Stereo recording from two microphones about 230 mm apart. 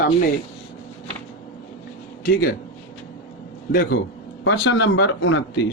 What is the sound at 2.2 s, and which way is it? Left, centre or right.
Speech, left.